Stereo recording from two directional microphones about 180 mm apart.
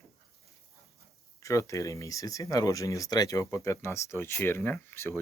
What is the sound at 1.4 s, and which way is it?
Speech, 15° left (ahead or behind).